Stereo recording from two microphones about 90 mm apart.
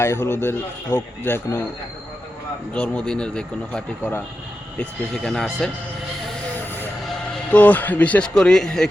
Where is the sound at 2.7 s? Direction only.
10° left (ahead or behind).